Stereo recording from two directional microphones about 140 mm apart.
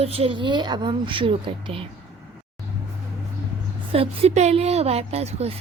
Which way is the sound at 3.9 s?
45° right (ahead or behind).